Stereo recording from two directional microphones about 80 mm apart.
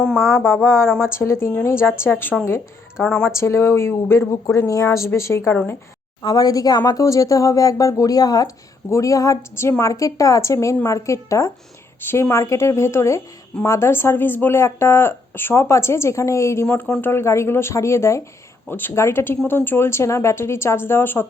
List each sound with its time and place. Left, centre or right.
0.0 s speech: centre
0.4 s speech: left
3.0 s speech: centre
3.2 s speech: left
4.5 s speech: left
6.2 s speech: left
8.9 s speech: left
16.6 s speech: centre
17.1 s speech: left